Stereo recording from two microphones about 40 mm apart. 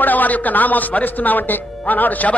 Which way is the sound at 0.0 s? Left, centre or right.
Left.